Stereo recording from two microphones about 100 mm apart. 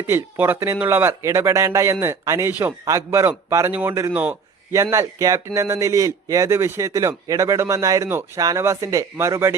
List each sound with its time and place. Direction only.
0.1 s speech: 20° right (ahead or behind)
3.7 s speech: 15° right (ahead or behind)
4.7 s speech: 30° right (ahead or behind)